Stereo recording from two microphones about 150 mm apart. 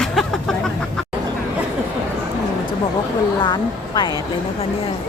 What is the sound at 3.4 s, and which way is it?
Speech, 30° left (ahead or behind).